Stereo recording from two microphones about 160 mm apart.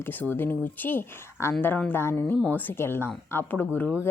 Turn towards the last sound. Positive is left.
turn(degrees=10)  # may be behind; listen again after turning